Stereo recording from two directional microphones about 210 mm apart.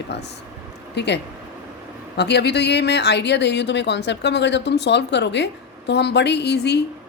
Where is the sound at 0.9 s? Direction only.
55° left (ahead or behind).